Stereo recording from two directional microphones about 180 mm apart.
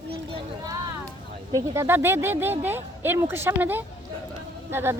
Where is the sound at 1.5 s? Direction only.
15° right (ahead or behind).